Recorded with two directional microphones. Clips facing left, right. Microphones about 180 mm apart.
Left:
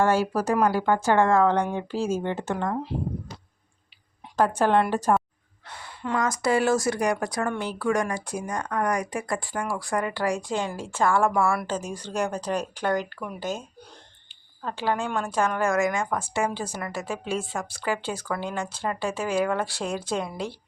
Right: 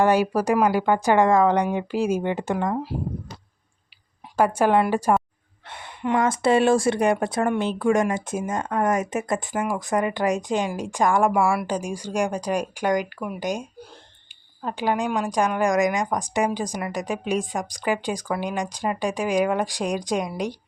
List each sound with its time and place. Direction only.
0.0 s speech: 15° right (ahead or behind)
4.4 s speech: 10° right (ahead or behind)
5.6 s speech: 25° right (ahead or behind)